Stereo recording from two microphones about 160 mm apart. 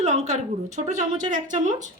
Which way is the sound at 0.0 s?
45° right (ahead or behind).